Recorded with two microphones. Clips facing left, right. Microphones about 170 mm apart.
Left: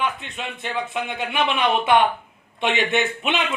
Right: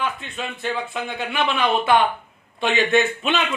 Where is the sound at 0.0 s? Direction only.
20° left (ahead or behind).